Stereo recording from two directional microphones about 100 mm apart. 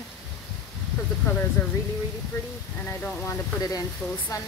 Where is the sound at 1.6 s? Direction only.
25° left (ahead or behind).